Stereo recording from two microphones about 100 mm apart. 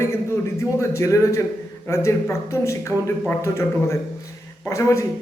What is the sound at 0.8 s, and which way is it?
Speech, 30° left (ahead or behind).